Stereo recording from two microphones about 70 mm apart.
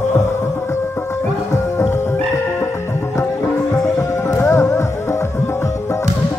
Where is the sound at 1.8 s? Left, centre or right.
Left.